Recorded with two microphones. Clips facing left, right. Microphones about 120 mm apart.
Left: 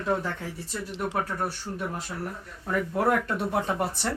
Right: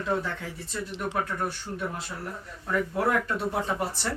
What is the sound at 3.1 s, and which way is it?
Speech, 50° left (ahead or behind).